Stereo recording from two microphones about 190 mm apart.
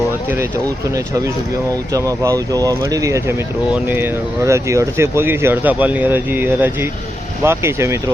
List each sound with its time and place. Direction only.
1.9 s speech: 15° right (ahead or behind)